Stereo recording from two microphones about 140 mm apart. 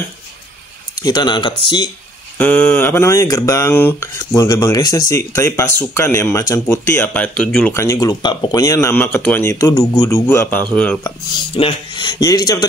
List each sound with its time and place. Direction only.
1.0 s speech: 30° left (ahead or behind)
2.3 s a man's voice: 15° left (ahead or behind)
7.7 s a man's voice: 20° left (ahead or behind)
11.5 s speech: 35° left (ahead or behind)